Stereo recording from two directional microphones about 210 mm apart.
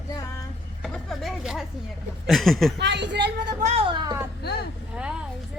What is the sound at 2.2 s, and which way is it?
Speech, centre (ahead or behind).